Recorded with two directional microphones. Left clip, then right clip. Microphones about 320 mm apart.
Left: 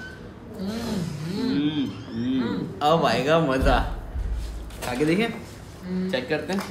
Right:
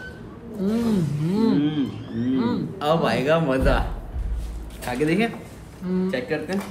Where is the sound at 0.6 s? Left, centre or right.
Centre.